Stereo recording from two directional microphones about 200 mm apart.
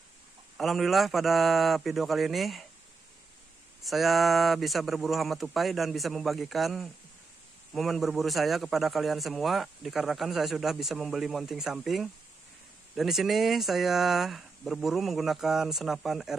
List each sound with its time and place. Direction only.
0.6 s a man's voice: centre (ahead or behind)
3.8 s a man's voice: centre (ahead or behind)